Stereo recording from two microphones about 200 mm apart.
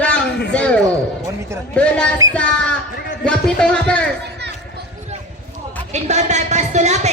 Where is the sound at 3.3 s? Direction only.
5° left (ahead or behind).